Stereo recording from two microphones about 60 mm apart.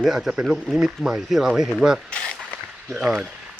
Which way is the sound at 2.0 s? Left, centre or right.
Centre.